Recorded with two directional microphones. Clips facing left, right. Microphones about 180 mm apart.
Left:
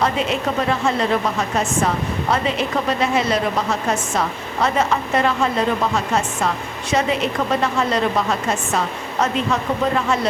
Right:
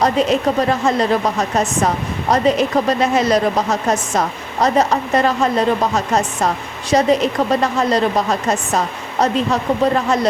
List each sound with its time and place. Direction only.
0.0 s a woman's voice: 40° right (ahead or behind)